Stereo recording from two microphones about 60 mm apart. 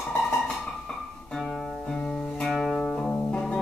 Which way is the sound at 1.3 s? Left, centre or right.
Centre.